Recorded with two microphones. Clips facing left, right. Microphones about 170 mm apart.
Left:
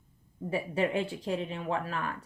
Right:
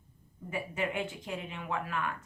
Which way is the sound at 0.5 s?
35° left (ahead or behind).